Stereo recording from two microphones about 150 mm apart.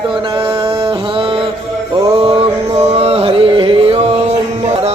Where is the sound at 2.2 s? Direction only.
40° right (ahead or behind).